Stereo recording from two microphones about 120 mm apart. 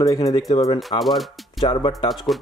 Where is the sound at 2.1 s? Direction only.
Centre (ahead or behind).